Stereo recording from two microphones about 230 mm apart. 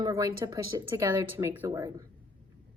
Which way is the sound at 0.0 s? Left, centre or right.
Centre.